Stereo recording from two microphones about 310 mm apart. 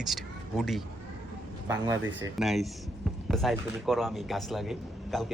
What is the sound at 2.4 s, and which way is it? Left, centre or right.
A man's voice, centre.